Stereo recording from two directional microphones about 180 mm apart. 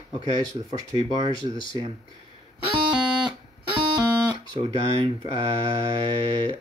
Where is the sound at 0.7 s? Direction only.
25° right (ahead or behind).